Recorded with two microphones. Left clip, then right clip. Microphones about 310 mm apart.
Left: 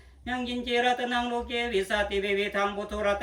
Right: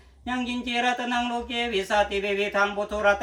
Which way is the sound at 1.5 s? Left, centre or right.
Centre.